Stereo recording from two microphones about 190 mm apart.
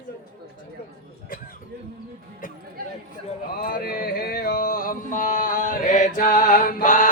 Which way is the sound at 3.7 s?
50° left (ahead or behind).